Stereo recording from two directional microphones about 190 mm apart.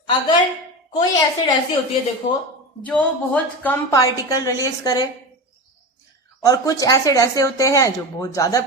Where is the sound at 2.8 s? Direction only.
5° left (ahead or behind).